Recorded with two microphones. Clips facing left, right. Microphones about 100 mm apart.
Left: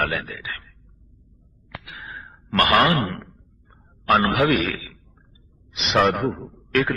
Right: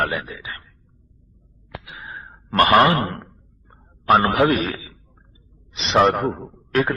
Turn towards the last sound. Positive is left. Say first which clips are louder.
# right 1 dB
turn(degrees=-25)  # may be behind; listen again after turning